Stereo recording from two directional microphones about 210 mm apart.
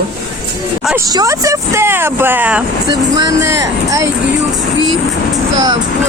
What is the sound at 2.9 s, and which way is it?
Speech, 20° right (ahead or behind).